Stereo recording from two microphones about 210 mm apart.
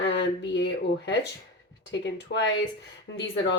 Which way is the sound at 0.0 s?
55° left (ahead or behind).